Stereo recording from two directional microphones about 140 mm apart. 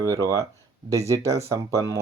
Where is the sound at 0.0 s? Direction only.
25° right (ahead or behind).